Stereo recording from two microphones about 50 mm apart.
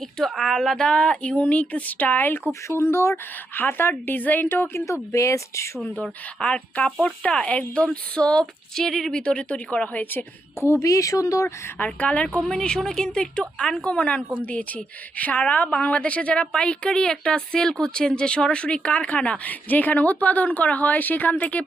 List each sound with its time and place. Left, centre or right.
0.3 s speech: centre
1.4 s speech: left
2.5 s speech: left
3.5 s speech: left
5.1 s a woman's voice: left
5.8 s a woman's voice: left; by 9.2 s centre
9.2 s a woman's voice: left
10.6 s speech: left
11.9 s a woman's voice: left
12.4 s a woman's voice: centre; by 21.6 s left